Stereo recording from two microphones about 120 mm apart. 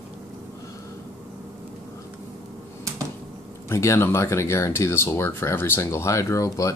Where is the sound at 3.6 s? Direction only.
25° left (ahead or behind).